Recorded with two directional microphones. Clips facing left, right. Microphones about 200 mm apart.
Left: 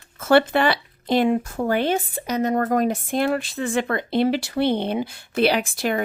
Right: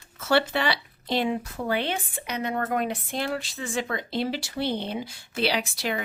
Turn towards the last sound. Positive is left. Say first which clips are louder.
# left 6 dB
turn(degrees=50)  # may be behind; listen again after turning